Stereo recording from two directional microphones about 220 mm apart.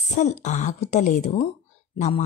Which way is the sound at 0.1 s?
30° left (ahead or behind).